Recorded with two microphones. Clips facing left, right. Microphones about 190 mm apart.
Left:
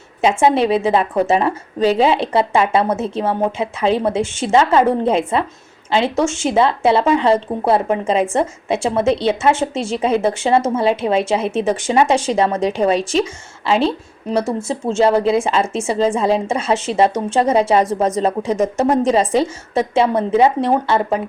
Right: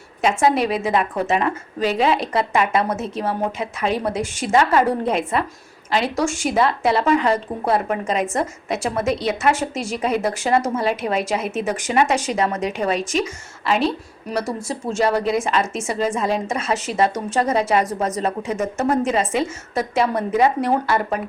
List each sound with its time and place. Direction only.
0.2 s a woman's voice: 25° left (ahead or behind)